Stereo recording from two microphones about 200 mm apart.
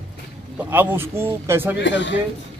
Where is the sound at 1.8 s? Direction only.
65° left (ahead or behind).